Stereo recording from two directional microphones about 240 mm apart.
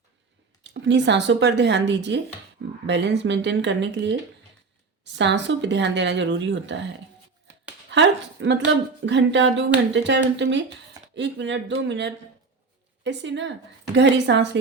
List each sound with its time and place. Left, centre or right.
0.6 s speech: right
7.9 s speech: right